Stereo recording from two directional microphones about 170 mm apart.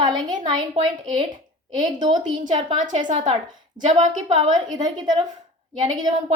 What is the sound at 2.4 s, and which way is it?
A woman's voice, 45° right (ahead or behind).